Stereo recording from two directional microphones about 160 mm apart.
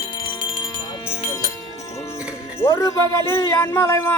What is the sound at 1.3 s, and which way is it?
Music, 20° left (ahead or behind).